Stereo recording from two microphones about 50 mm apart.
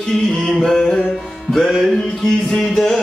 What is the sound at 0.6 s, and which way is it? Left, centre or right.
Music, centre.